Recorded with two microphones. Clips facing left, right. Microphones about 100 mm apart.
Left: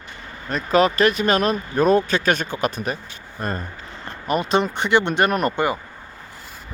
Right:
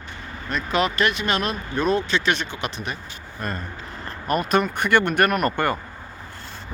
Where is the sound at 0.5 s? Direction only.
35° left (ahead or behind); by 5.8 s 15° left (ahead or behind).